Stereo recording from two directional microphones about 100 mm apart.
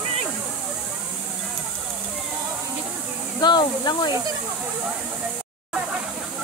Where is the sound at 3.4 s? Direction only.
50° left (ahead or behind).